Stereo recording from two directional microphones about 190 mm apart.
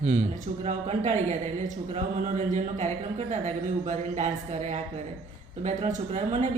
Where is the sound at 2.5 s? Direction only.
40° right (ahead or behind).